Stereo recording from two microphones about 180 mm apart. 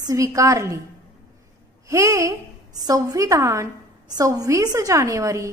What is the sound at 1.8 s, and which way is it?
A woman's voice, 15° right (ahead or behind).